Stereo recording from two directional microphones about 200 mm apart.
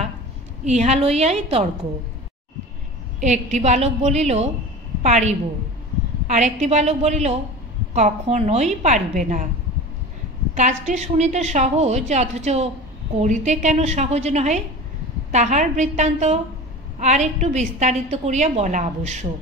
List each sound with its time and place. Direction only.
0.7 s a woman's voice: 35° right (ahead or behind)
3.2 s a woman's voice: 35° right (ahead or behind)
10.5 s a woman's voice: 35° right (ahead or behind)